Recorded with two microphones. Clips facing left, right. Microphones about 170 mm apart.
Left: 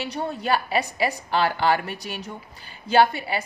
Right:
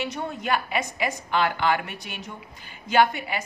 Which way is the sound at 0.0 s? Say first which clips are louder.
Left 2 dB; 35° left (ahead or behind).